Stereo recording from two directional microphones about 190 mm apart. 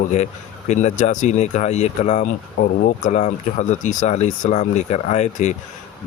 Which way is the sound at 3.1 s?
40° left (ahead or behind).